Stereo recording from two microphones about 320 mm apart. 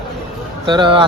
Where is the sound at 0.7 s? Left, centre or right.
Centre.